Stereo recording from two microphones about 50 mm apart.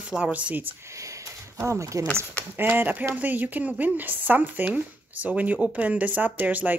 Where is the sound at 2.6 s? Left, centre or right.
Right.